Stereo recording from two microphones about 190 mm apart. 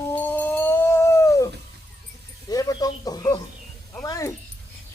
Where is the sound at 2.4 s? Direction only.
20° left (ahead or behind).